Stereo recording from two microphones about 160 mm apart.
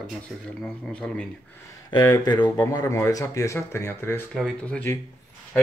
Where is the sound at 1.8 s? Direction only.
25° left (ahead or behind); by 5.0 s 10° left (ahead or behind).